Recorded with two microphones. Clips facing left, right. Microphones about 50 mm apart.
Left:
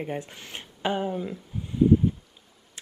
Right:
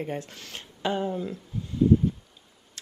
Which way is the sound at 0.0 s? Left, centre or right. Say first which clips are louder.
Even; centre.